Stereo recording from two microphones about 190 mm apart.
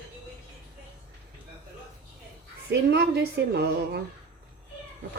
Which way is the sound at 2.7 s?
65° right (ahead or behind).